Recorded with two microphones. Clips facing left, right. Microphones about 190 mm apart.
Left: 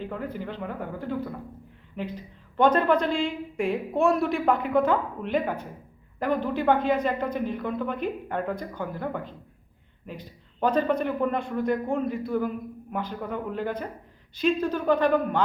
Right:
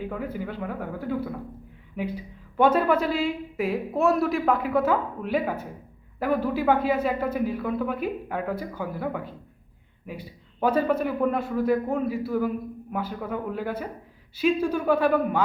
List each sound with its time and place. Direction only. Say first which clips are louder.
0.0 s a man's voice: right 2 dB; 10° right (ahead or behind)